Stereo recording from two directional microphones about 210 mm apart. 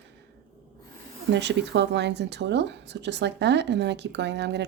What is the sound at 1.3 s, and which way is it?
Speech, 55° right (ahead or behind).